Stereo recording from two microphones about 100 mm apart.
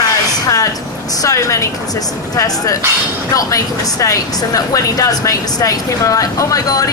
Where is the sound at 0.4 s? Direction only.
35° left (ahead or behind).